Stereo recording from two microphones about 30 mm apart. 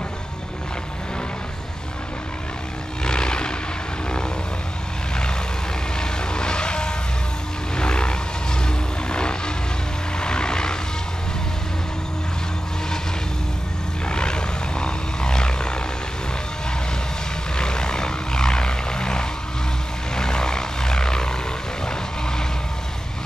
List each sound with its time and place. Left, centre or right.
3.0 s vehicle: left
5.9 s vehicle: left
14.0 s vehicle: left
17.6 s vehicle: left